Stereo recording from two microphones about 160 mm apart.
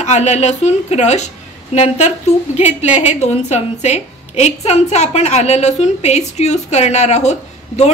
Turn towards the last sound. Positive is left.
turn(degrees=45)  # may be behind; listen again after turning